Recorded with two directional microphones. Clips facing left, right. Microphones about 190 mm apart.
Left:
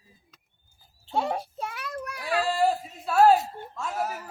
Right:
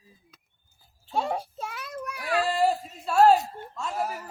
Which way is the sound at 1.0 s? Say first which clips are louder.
Left 1 dB; 25° left (ahead or behind).